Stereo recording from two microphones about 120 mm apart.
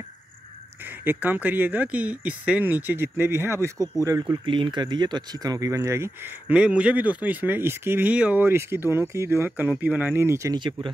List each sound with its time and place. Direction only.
0.8 s speech: 15° right (ahead or behind)
4.3 s speech: 40° right (ahead or behind); by 10.5 s 20° right (ahead or behind)
10.5 s speech: 40° right (ahead or behind)